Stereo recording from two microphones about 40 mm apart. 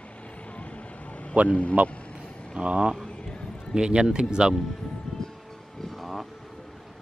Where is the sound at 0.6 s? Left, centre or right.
Left.